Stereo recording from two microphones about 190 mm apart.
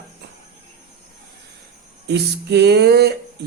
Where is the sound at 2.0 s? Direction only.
60° right (ahead or behind).